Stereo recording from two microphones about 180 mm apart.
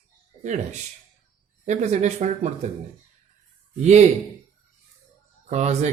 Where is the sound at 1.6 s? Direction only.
40° right (ahead or behind).